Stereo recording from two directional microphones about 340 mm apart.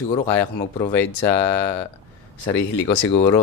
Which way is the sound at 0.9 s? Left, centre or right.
Centre.